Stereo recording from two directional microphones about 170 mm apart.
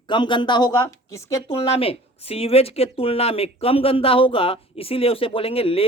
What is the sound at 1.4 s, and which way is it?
Speech, 35° left (ahead or behind).